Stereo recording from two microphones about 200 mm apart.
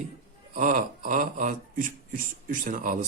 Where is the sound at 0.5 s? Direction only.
40° right (ahead or behind).